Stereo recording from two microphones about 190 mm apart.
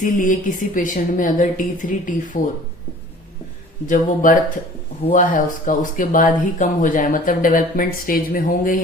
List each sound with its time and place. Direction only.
0.0 s speech: 45° left (ahead or behind)
3.8 s speech: 45° left (ahead or behind)